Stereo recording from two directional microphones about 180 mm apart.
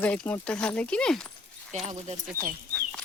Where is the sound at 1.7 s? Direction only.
40° right (ahead or behind).